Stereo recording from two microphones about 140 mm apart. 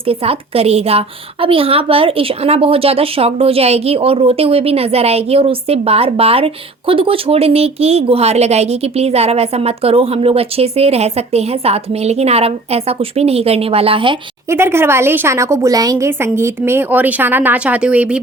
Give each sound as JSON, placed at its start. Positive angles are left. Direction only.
{"t": 0.1, "sound": "a woman's voice", "side_deg": -45}
{"t": 14.5, "sound": "a woman's voice", "side_deg": -15}